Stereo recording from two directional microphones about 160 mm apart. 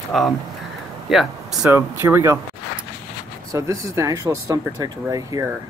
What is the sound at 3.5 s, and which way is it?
Speech, 20° right (ahead or behind).